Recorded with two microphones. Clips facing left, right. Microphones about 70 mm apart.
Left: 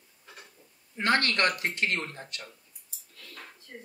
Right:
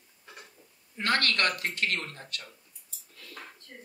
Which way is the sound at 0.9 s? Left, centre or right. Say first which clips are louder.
Left 2 dB; left.